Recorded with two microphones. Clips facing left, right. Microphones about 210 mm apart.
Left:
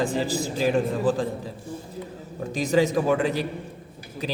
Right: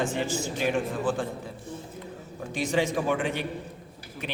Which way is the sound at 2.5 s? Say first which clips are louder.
Left 5 dB; 40° left (ahead or behind).